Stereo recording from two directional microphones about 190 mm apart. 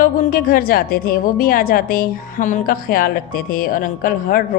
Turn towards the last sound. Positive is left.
turn(degrees=50)  # may be behind; listen again after turning